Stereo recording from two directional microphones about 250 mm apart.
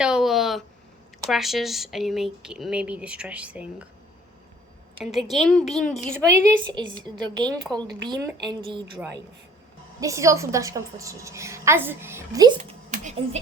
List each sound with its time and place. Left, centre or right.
0.0 s a sound: centre
1.3 s speech: centre
4.9 s speech: centre
6.2 s a woman's voice: centre
10.0 s a woman's voice: centre
12.9 s speech: right